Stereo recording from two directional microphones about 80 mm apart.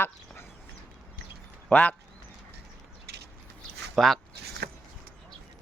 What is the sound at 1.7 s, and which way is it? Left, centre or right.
Speech, centre.